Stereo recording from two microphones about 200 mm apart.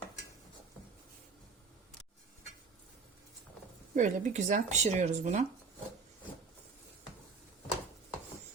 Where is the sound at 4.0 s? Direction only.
35° right (ahead or behind).